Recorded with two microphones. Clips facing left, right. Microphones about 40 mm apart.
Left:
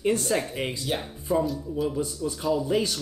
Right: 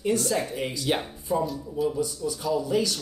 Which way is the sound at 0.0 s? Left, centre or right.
Left.